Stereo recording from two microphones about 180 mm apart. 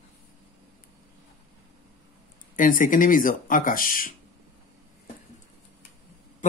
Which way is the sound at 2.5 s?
50° left (ahead or behind).